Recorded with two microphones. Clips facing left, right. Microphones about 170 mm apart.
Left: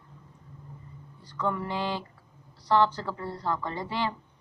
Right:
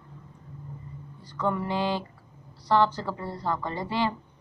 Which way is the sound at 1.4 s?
15° right (ahead or behind).